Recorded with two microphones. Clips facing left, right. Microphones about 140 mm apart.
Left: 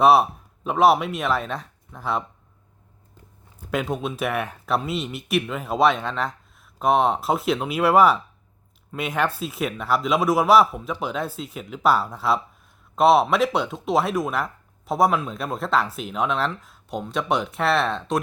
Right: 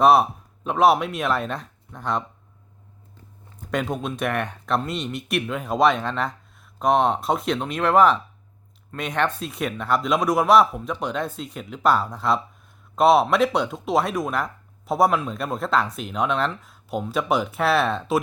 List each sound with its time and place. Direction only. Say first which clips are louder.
0.0 s speech: even; centre (ahead or behind)
3.6 s speech: even; 5° left (ahead or behind)